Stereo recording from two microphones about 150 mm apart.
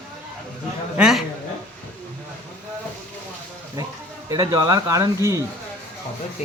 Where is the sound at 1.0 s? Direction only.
5° right (ahead or behind).